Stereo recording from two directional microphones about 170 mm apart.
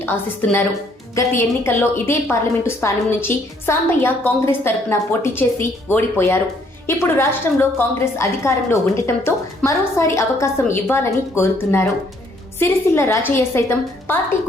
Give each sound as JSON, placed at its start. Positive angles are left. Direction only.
{"t": 1.1, "sound": "a woman's voice", "side_deg": 15}
{"t": 12.5, "sound": "a woman's voice", "side_deg": 15}